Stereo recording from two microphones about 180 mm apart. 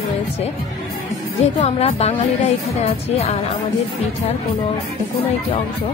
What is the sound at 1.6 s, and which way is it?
Speech, 35° left (ahead or behind).